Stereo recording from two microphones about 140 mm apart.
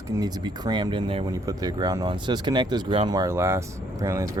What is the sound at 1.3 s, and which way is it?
Speech, 25° right (ahead or behind).